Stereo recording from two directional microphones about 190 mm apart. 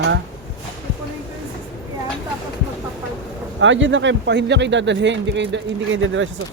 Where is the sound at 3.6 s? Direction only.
80° right.